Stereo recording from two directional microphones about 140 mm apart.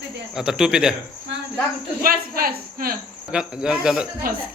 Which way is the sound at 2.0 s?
90° right.